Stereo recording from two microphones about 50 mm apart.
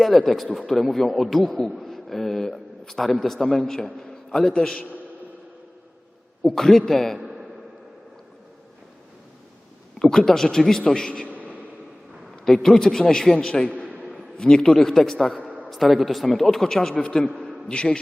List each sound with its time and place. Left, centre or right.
0.0 s a man's voice: centre
6.4 s a man's voice: centre
10.0 s a man's voice: centre
11.3 s a sound: right
12.5 s a man's voice: centre
15.4 s a sound: right
15.7 s a man's voice: centre